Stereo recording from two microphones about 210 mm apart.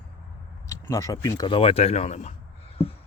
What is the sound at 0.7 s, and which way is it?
Speech, 15° left (ahead or behind).